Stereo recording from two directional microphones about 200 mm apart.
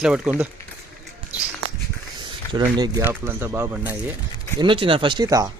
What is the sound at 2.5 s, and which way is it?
Speech, 20° right (ahead or behind).